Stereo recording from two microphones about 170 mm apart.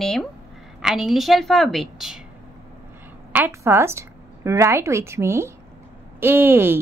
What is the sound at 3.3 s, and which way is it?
A woman's voice, 15° right (ahead or behind).